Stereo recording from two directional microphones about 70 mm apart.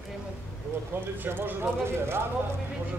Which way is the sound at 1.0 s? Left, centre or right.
Right.